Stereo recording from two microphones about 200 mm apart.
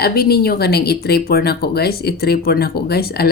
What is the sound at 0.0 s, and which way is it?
Speech, 50° left (ahead or behind).